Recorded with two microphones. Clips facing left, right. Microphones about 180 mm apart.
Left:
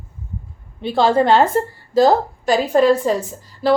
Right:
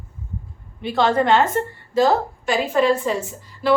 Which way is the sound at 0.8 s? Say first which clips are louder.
Left 3 dB; 30° left (ahead or behind).